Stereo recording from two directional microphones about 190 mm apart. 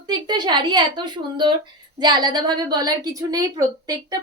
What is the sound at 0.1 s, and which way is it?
A woman's voice, 25° right (ahead or behind).